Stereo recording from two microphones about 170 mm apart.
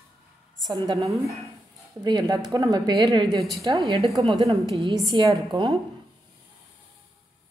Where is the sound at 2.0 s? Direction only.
25° right (ahead or behind).